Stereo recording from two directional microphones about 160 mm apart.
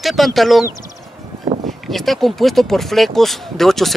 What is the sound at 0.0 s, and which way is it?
Speech, centre (ahead or behind).